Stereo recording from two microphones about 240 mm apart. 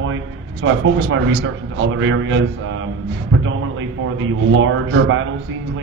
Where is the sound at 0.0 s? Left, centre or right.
Right.